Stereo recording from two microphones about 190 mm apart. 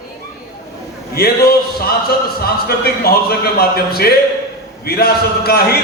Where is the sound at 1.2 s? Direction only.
55° left (ahead or behind).